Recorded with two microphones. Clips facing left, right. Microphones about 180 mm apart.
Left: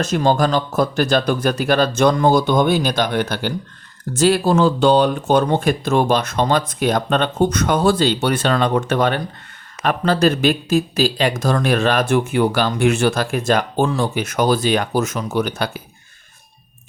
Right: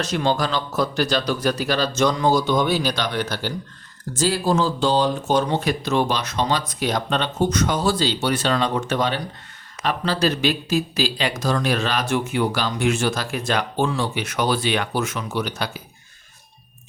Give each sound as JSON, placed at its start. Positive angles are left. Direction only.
{"t": 0.0, "sound": "speech", "side_deg": 50}